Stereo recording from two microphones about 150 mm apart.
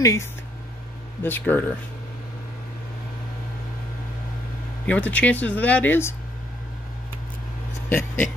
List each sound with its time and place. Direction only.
0.0 s speech: 20° left (ahead or behind)
4.8 s speech: 10° left (ahead or behind)